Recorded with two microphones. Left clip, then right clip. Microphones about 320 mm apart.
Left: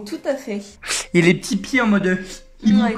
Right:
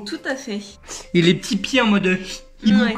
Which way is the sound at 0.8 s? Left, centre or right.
Left.